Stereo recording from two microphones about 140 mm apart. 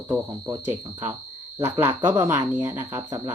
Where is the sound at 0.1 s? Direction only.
25° right (ahead or behind).